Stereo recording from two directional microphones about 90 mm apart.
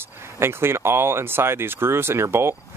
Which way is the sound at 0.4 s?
25° right (ahead or behind).